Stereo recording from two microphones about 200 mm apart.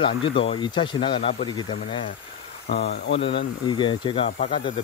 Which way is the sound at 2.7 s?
55° left (ahead or behind).